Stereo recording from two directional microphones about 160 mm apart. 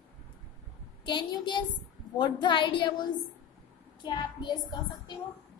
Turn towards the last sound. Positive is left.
turn(degrees=25)  # may be behind; listen again after turning